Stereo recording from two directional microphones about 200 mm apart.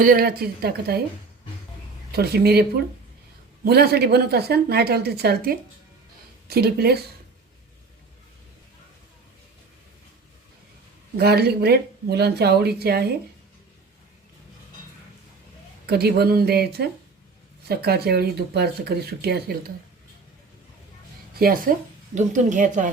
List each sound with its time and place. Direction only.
0.0 s speech: 45° right (ahead or behind)
2.1 s speech: 50° right (ahead or behind)
11.2 s speech: 55° right (ahead or behind)
15.9 s speech: 50° right (ahead or behind)
21.3 s a woman's voice: 45° right (ahead or behind)